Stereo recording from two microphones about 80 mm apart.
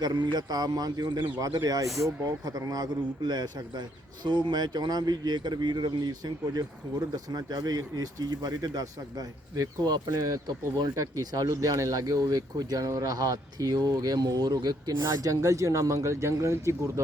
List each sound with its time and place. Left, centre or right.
0.0 s a man's voice: right
15.3 s speech: right